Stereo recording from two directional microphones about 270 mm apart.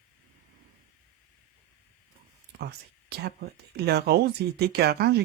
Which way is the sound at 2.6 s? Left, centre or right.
Right.